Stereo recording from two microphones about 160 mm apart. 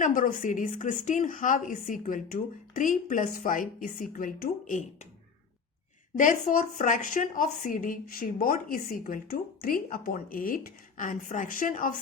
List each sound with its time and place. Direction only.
0.0 s speech: 60° left (ahead or behind)
6.1 s speech: 55° left (ahead or behind)